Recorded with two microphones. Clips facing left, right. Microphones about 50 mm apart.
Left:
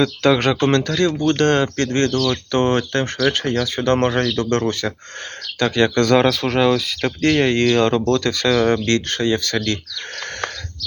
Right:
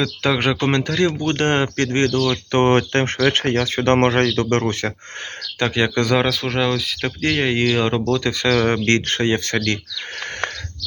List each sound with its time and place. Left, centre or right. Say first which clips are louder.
0.2 s speech: left 1 dB; centre; by 4.9 s right
5.5 s speech: left 3 dB; centre
8.4 s speech: even; right